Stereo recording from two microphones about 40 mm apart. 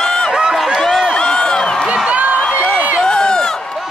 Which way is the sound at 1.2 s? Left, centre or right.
Centre.